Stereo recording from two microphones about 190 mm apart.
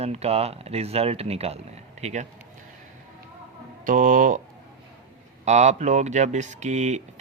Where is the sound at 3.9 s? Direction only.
45° right (ahead or behind).